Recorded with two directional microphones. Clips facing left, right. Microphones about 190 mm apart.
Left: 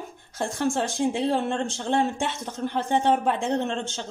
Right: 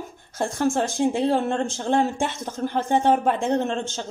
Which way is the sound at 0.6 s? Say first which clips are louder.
Right 3 dB; 45° right (ahead or behind).